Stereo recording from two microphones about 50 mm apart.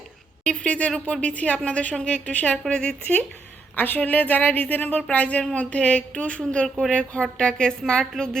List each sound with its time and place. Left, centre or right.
0.4 s a woman's voice: left